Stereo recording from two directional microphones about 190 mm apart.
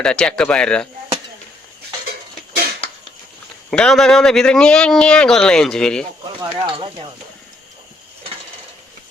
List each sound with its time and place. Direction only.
0.0 s a man's voice: 5° left (ahead or behind)
3.7 s a man's voice: centre (ahead or behind)
6.4 s speech: 25° right (ahead or behind)